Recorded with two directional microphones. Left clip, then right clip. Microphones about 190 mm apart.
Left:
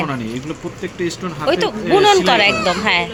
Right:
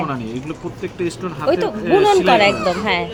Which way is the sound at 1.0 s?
15° left (ahead or behind).